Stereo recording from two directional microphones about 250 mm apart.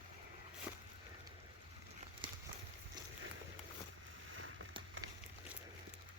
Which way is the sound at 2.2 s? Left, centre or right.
Centre.